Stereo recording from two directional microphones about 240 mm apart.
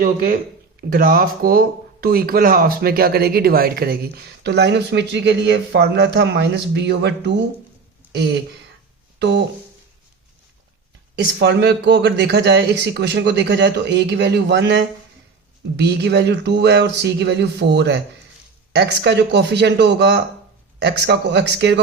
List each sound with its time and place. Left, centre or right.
0.0 s speech: right
11.3 s a man's voice: right